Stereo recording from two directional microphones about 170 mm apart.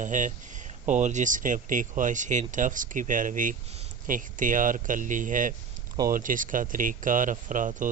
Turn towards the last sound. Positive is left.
turn(degrees=-50)  # may be behind; listen again after turning